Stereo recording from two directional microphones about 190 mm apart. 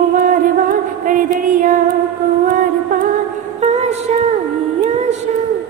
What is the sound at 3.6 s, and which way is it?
Music, 35° right (ahead or behind).